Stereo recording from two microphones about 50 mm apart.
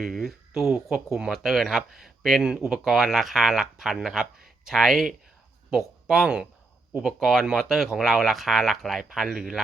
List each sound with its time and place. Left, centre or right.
0.0 s speech: centre
4.8 s speech: centre
6.2 s speech: centre
7.0 s speech: centre